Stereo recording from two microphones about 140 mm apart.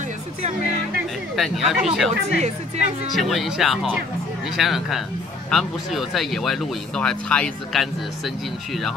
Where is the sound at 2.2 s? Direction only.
55° right (ahead or behind).